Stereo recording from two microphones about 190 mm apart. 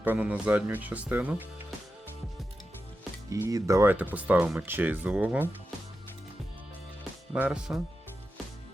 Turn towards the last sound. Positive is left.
turn(degrees=-5)  # may be behind; listen again after turning